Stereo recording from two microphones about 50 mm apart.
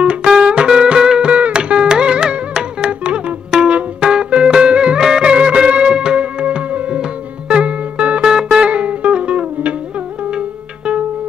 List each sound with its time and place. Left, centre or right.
0.0 s music: right
8.2 s music: centre
8.6 s music: right